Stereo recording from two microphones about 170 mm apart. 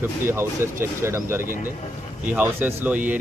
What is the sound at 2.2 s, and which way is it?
Speech, 10° right (ahead or behind).